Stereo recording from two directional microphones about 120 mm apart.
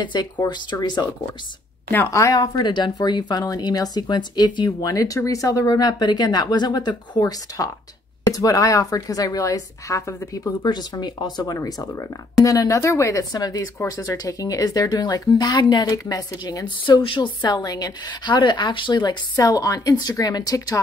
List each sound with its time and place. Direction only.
0.0 s speech: 35° left (ahead or behind)
1.9 s speech: 25° left (ahead or behind)
10.6 s speech: 35° left (ahead or behind)